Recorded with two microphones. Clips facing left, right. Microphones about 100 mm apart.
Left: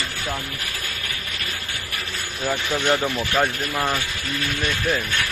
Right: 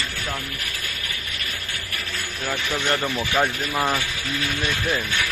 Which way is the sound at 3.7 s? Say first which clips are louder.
Right 1 dB; 10° right (ahead or behind).